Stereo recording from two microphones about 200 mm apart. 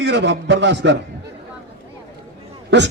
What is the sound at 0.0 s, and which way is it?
Speech, 60° right (ahead or behind).